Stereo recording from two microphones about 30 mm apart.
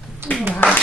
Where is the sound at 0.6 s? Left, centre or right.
Left.